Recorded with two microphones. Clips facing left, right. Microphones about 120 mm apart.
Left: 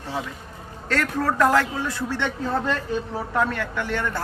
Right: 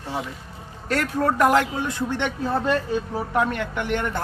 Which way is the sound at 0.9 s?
15° right (ahead or behind).